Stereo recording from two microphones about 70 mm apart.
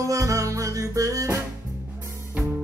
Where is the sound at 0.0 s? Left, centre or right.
Right.